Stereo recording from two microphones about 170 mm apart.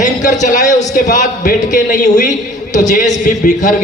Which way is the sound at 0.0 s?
45° left (ahead or behind).